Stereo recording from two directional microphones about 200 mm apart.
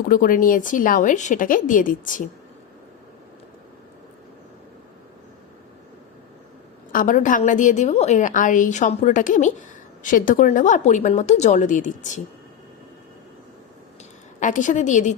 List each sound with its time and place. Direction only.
0.1 s a woman's voice: 45° left (ahead or behind)
6.9 s a woman's voice: 40° left (ahead or behind)
14.3 s a woman's voice: 40° left (ahead or behind)